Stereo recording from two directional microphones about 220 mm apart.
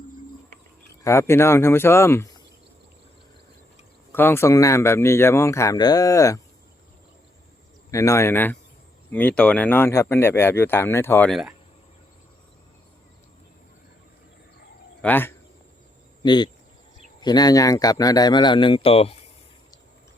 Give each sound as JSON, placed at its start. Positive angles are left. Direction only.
{"t": 1.0, "sound": "speech", "side_deg": 10}
{"t": 4.1, "sound": "speech", "side_deg": 10}
{"t": 7.9, "sound": "speech", "side_deg": 15}
{"t": 15.0, "sound": "speech", "side_deg": 10}
{"t": 16.2, "sound": "a man's voice", "side_deg": 20}